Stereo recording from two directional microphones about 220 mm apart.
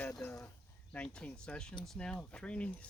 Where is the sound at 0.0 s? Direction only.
10° left (ahead or behind).